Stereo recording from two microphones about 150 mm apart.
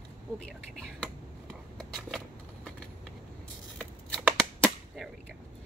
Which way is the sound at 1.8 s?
Centre (ahead or behind).